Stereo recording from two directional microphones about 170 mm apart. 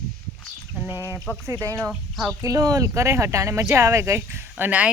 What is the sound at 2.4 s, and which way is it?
Speech, 20° right (ahead or behind).